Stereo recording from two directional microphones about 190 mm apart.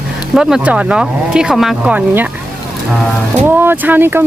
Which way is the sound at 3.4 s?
10° right (ahead or behind).